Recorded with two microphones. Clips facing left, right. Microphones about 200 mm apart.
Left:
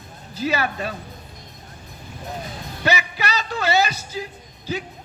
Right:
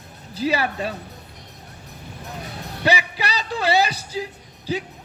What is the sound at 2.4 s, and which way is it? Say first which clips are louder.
Music: even; 70° right (ahead or behind).